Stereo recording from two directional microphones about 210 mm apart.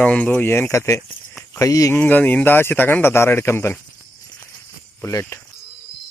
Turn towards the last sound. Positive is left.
turn(degrees=10)  # may be behind; listen again after turning